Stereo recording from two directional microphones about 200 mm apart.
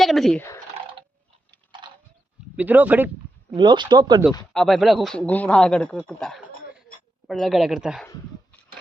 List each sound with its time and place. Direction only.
0.0 s speech: centre (ahead or behind)
2.6 s speech: 10° right (ahead or behind)
3.5 s speech: 20° right (ahead or behind)
4.5 s speech: centre (ahead or behind)